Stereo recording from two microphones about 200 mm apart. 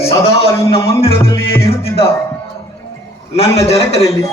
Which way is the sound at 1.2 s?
15° left (ahead or behind).